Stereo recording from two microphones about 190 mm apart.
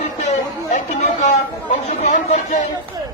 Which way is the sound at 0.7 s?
35° left (ahead or behind).